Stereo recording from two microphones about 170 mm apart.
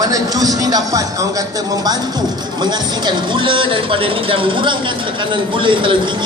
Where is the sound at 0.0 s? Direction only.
20° right (ahead or behind).